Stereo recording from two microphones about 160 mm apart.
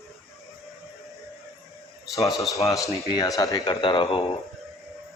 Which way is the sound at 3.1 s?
20° left (ahead or behind).